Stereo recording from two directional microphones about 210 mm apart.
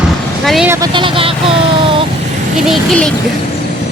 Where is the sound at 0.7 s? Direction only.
20° right (ahead or behind).